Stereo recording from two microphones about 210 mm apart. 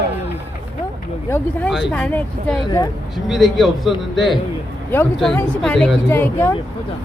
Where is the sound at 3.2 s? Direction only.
Centre (ahead or behind).